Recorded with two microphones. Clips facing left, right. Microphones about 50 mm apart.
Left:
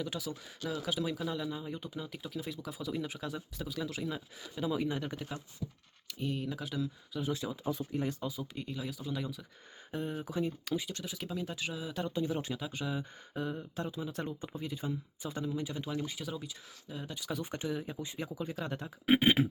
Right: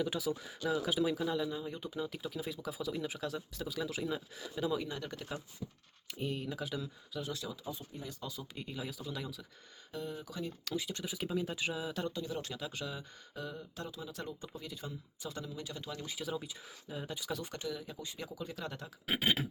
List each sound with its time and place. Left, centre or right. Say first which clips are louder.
0.0 s speech: right 3 dB; centre
6.1 s speech: left 1 dB; centre
7.3 s speech: left 4 dB; left
7.6 s speech: left 9 dB; left
8.2 s speech: left 6 dB; centre
8.5 s speech: left 2 dB; centre
9.9 s speech: left 5 dB; left
10.7 s speech: left 3 dB; centre
10.9 s speech: right 3 dB; centre
12.1 s speech: left 5 dB; left
16.0 s speech: right 1 dB; centre
17.4 s speech: left 4 dB; left